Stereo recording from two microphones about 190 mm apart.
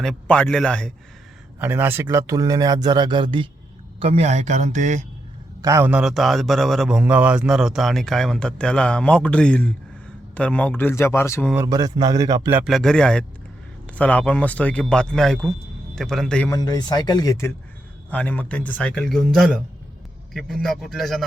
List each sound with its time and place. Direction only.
0.0 s a man's voice: 5° left (ahead or behind)
1.5 s a man's voice: 10° right (ahead or behind); by 5.0 s 40° right (ahead or behind)
5.6 s a man's voice: 10° right (ahead or behind); by 11.5 s 10° left (ahead or behind)
11.5 s a man's voice: 20° right (ahead or behind); by 16.5 s 5° left (ahead or behind)
16.5 s a man's voice: 20° left (ahead or behind); by 21.2 s centre (ahead or behind)